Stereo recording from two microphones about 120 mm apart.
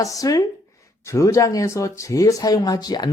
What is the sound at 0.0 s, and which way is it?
Speech, 30° left (ahead or behind).